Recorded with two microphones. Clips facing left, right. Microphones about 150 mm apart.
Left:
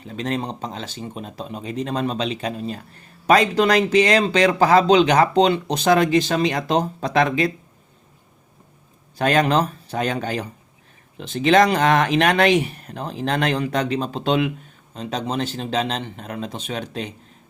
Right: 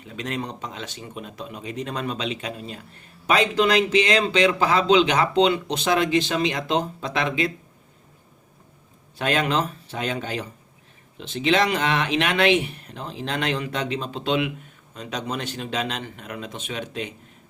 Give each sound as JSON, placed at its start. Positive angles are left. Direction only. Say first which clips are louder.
{"t": 0.1, "sound": "a man's voice", "louder": "left 4 dB", "side_deg": 35}
{"t": 9.1, "sound": "a man's voice", "louder": "left 5 dB", "side_deg": 40}